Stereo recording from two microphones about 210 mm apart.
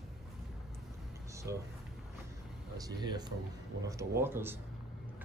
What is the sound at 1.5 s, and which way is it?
Speech, 15° right (ahead or behind).